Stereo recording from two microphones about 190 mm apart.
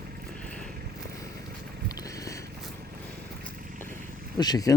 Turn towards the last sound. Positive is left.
turn(degrees=20)  # may be behind; listen again after turning